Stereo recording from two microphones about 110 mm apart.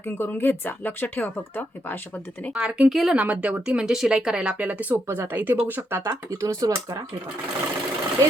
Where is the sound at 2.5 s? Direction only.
5° right (ahead or behind); by 7.1 s 30° right (ahead or behind).